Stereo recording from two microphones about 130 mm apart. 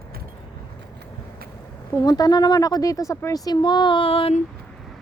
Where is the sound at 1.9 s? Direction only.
30° left (ahead or behind); by 4.3 s 45° left (ahead or behind).